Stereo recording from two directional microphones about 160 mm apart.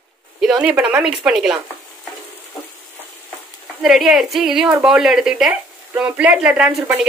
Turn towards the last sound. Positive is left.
turn(degrees=-5)  # may be behind; listen again after turning